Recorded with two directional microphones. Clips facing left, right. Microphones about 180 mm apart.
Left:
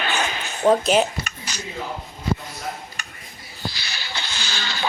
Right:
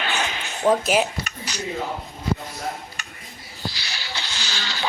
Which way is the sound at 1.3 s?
50° left (ahead or behind).